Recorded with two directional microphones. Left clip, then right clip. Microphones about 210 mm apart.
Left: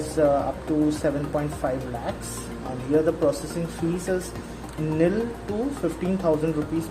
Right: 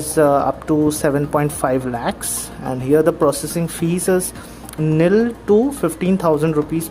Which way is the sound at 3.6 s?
40° right (ahead or behind).